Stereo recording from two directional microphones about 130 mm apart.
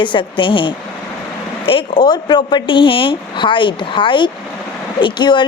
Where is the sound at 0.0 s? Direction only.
40° left (ahead or behind).